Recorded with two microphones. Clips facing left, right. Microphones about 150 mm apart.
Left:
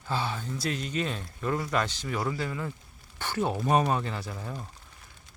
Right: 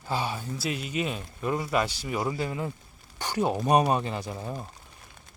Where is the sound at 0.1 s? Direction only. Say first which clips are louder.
Right 1 dB; 10° right (ahead or behind).